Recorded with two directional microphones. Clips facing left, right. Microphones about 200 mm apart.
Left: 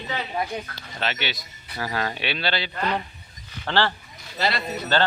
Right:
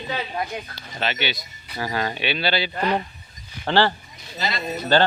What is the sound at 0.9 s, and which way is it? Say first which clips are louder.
A man's voice: right 2 dB; centre (ahead or behind).